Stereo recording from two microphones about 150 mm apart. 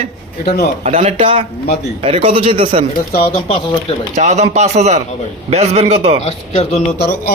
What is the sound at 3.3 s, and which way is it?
Speech, 40° left (ahead or behind).